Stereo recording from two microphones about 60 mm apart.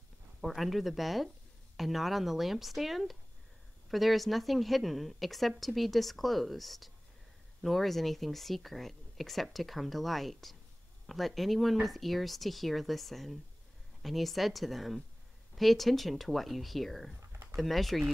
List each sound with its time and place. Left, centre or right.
0.4 s speech: centre
17.2 s a sound: right
17.6 s speech: centre